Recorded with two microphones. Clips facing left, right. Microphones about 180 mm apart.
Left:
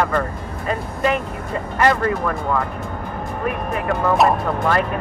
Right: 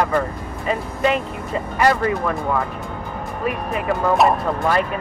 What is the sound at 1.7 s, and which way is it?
Speech, 10° right (ahead or behind).